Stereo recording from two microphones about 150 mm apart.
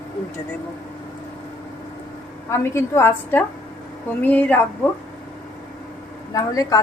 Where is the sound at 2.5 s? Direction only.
20° left (ahead or behind).